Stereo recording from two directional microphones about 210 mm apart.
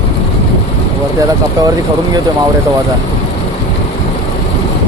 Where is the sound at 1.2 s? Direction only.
15° right (ahead or behind).